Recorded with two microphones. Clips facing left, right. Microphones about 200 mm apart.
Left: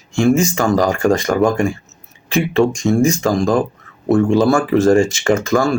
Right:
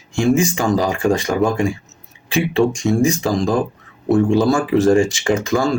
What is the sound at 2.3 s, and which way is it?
Speech, 15° right (ahead or behind).